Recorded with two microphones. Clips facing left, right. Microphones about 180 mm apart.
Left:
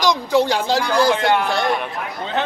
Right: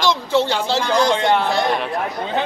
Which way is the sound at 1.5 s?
Centre (ahead or behind).